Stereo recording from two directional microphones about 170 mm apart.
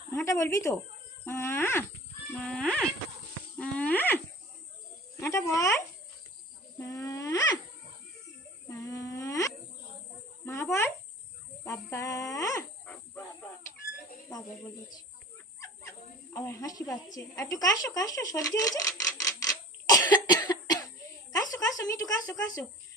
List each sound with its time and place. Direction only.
0.1 s speech: 15° left (ahead or behind)
3.6 s wild animals: 10° left (ahead or behind)
5.5 s speech: 20° left (ahead or behind)
6.7 s a sound: 20° left (ahead or behind)
8.7 s a sound: 20° left (ahead or behind)
11.6 s speech: 15° left (ahead or behind)
16.3 s speech: 15° left (ahead or behind)
17.2 s a sound: 20° left (ahead or behind)
21.3 s speech: 20° left (ahead or behind)